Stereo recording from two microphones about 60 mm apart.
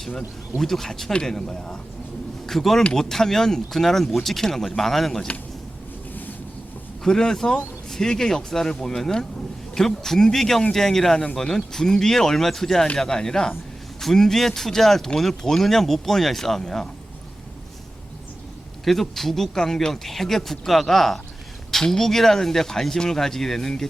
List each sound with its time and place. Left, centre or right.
0.2 s speech: centre
7.0 s speech: centre
18.9 s speech: centre